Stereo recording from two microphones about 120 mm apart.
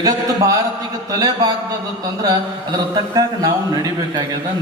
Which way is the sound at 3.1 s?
30° right (ahead or behind).